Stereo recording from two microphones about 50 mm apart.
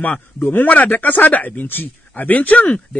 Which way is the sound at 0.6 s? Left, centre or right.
Left.